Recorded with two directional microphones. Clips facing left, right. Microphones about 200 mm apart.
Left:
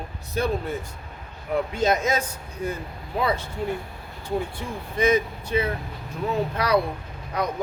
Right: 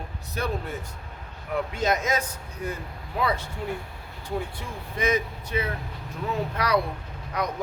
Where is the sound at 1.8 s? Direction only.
30° left (ahead or behind).